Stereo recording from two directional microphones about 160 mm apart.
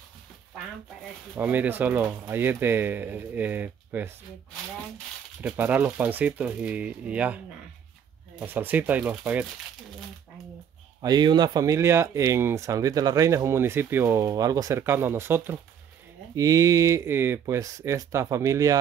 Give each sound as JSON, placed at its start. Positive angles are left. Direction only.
{"t": 1.3, "sound": "speech", "side_deg": -10}
{"t": 5.4, "sound": "speech", "side_deg": -10}
{"t": 8.4, "sound": "speech", "side_deg": -10}
{"t": 11.0, "sound": "speech", "side_deg": -25}